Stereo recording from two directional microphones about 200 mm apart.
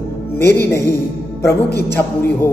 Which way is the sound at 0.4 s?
55° left (ahead or behind).